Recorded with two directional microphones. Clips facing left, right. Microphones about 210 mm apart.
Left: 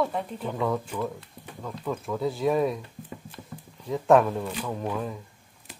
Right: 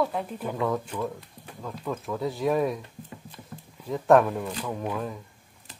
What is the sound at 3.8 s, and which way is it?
Speech, centre (ahead or behind).